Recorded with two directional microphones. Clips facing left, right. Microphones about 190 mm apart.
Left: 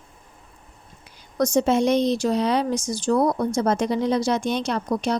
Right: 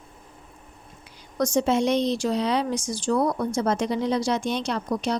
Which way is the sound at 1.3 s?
45° left (ahead or behind).